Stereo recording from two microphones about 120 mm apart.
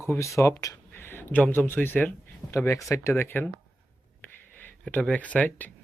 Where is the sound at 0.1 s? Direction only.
25° left (ahead or behind).